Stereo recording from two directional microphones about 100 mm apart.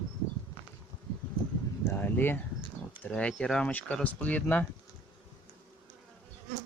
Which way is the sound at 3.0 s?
10° left (ahead or behind).